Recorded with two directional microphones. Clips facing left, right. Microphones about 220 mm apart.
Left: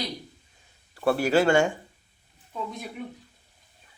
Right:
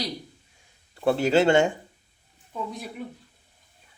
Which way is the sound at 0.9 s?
20° right (ahead or behind).